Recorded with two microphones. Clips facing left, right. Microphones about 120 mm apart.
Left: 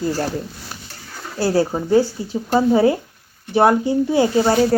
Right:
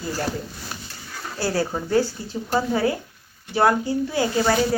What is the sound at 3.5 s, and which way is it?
Speech, 25° left (ahead or behind).